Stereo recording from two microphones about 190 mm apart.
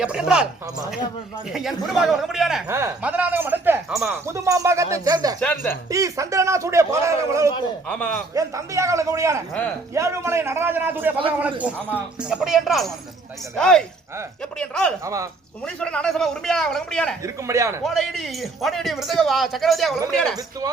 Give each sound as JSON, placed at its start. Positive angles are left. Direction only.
{"t": 0.0, "sound": "a man's voice", "side_deg": -5}
{"t": 1.5, "sound": "a man's voice", "side_deg": 0}
{"t": 2.6, "sound": "a man's voice", "side_deg": -15}
{"t": 4.3, "sound": "a man's voice", "side_deg": -15}
{"t": 7.9, "sound": "a man's voice", "side_deg": 5}
{"t": 8.4, "sound": "a man's voice", "side_deg": -15}
{"t": 15.0, "sound": "a man's voice", "side_deg": -15}
{"t": 15.6, "sound": "a man's voice", "side_deg": 5}
{"t": 17.2, "sound": "a man's voice", "side_deg": -15}
{"t": 17.8, "sound": "a man's voice", "side_deg": 0}